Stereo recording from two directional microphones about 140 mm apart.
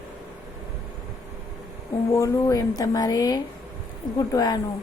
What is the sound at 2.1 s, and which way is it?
A woman's voice, 25° left (ahead or behind).